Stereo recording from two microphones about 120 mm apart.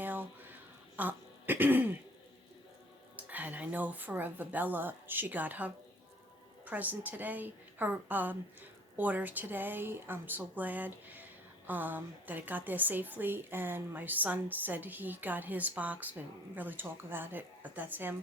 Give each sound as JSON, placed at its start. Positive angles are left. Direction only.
{"t": 0.0, "sound": "a sound", "side_deg": -15}
{"t": 0.9, "sound": "throat clearing", "side_deg": -15}
{"t": 3.2, "sound": "speech", "side_deg": -15}